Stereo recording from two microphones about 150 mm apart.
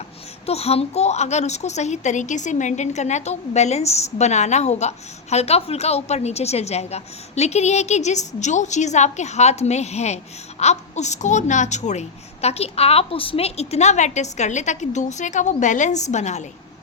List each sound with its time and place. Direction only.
0.4 s a woman's voice: 45° left (ahead or behind)